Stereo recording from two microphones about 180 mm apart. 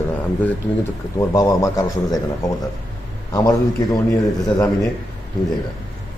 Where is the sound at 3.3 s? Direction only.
20° left (ahead or behind).